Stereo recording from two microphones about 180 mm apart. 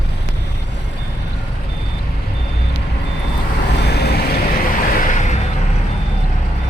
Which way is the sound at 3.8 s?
65° left (ahead or behind).